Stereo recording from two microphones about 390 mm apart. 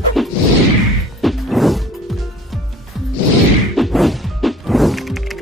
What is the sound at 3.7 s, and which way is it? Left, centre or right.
Music, centre.